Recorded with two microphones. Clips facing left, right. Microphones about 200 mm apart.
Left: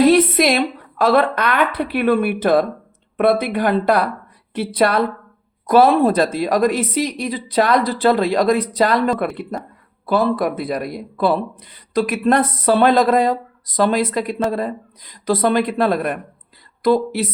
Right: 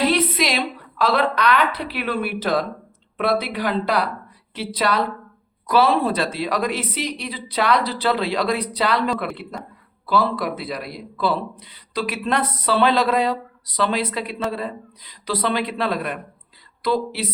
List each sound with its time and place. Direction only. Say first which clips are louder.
0.0 s a woman's voice: left 7 dB; 50° left (ahead or behind)